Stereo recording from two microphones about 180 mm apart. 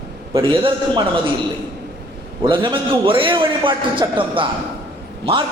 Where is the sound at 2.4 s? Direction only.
25° right (ahead or behind).